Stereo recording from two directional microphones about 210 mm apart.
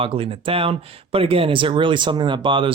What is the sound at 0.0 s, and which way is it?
Speech, 25° right (ahead or behind).